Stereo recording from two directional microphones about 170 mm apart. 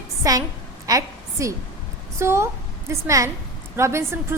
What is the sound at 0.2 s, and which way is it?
A woman's voice, 20° right (ahead or behind).